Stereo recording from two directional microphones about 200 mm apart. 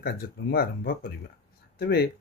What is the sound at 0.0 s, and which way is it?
Speech, 50° left (ahead or behind).